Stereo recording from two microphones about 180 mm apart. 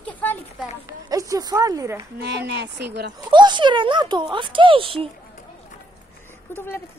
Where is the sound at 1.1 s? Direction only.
20° right (ahead or behind).